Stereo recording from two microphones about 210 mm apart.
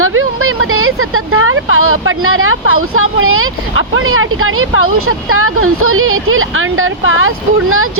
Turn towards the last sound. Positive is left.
turn(degrees=-85)